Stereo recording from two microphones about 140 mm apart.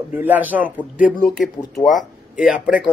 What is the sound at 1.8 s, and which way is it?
Speech, centre (ahead or behind).